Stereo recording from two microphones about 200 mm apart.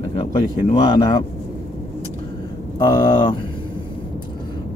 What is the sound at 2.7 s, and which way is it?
Speech, 20° left (ahead or behind).